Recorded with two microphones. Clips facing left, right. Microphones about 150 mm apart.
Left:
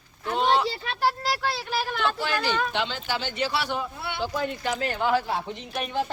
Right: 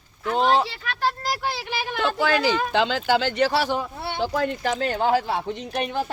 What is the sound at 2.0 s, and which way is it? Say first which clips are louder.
Speech: right 9 dB; 90° right.